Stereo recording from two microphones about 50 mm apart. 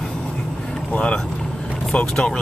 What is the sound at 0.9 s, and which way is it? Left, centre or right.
Speech, left.